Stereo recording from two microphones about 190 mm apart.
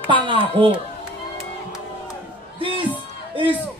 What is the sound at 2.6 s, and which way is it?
Speech, 25° right (ahead or behind).